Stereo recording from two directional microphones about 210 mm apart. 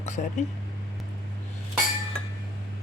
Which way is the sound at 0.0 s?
35° left (ahead or behind).